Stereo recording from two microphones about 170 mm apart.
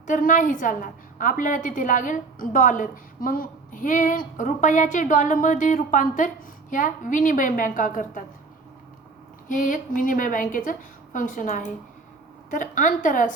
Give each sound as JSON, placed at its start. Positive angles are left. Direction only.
{"t": 0.1, "sound": "a woman's voice", "side_deg": 50}
{"t": 9.5, "sound": "a woman's voice", "side_deg": 50}